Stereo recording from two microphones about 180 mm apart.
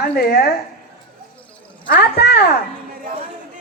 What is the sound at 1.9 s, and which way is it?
Speech, 65° left (ahead or behind).